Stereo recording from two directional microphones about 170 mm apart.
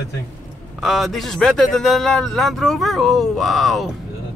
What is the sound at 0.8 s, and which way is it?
A man's voice, centre (ahead or behind).